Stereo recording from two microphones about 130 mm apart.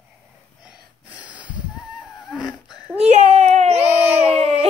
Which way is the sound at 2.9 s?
55° right (ahead or behind).